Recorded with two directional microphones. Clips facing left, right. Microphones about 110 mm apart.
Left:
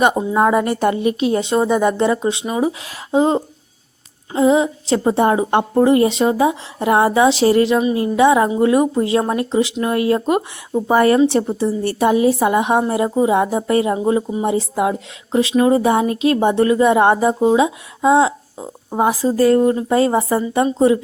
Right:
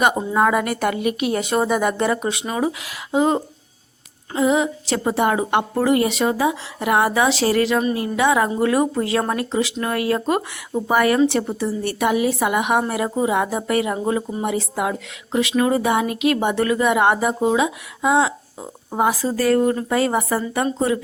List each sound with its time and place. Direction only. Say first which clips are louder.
0.2 s speech: left 3 dB; 25° left (ahead or behind)
2.8 s speech: left 2 dB; 25° left (ahead or behind)